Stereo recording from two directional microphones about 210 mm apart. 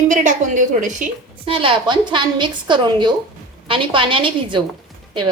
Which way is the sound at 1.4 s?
25° right (ahead or behind).